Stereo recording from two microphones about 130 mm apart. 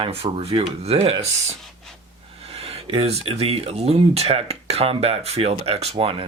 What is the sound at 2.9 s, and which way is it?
Speech, 50° right (ahead or behind).